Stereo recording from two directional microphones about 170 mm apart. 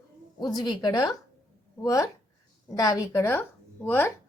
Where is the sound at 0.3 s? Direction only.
25° left (ahead or behind).